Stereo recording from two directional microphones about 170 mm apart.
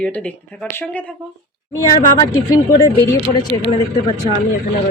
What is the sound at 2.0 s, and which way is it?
Speech, 25° left (ahead or behind).